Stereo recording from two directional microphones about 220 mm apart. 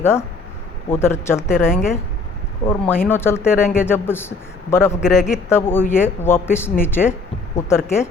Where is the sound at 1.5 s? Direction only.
35° left (ahead or behind).